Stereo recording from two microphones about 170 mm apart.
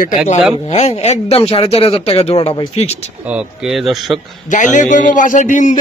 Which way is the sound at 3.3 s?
Centre (ahead or behind).